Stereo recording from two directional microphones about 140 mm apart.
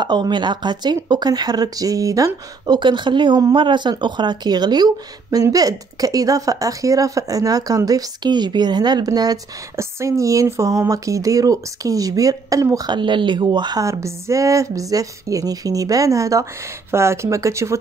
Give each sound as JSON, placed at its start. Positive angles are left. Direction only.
{"t": 0.0, "sound": "speech", "side_deg": -30}